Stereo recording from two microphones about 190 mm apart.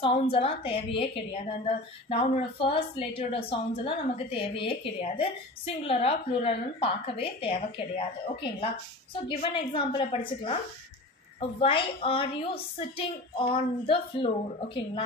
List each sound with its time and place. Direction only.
0.0 s a woman's voice: 30° left (ahead or behind)